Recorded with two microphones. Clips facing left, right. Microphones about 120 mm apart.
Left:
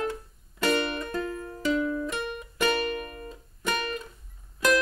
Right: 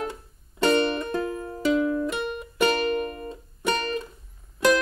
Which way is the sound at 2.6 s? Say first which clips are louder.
Right 4 dB; 30° right (ahead or behind).